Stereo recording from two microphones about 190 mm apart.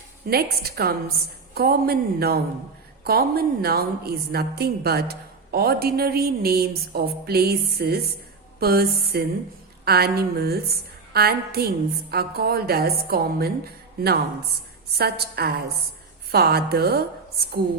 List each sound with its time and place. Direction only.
0.3 s a woman's voice: 55° right (ahead or behind)